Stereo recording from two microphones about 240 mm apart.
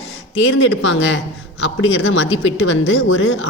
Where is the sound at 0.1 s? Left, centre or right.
Left.